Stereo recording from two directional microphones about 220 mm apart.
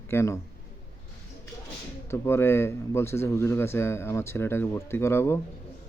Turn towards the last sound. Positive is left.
turn(degrees=10)  # may be behind; listen again after turning